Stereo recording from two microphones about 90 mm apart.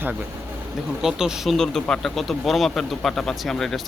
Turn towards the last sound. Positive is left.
turn(degrees=5)  # may be behind; listen again after turning